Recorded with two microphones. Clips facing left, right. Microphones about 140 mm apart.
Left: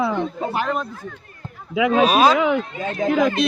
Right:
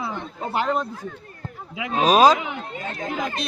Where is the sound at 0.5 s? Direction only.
25° right (ahead or behind).